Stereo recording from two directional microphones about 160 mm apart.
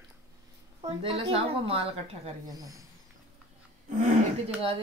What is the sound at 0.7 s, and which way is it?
Speech, 35° right (ahead or behind).